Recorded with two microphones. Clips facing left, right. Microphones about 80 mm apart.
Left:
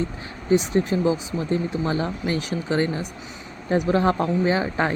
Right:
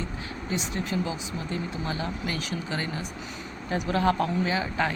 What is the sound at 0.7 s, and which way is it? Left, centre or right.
Speech, left.